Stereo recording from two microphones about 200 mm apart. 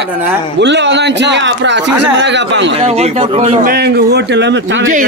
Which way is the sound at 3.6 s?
50° right (ahead or behind).